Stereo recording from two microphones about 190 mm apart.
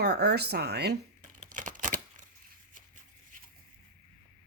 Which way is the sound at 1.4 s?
45° right (ahead or behind).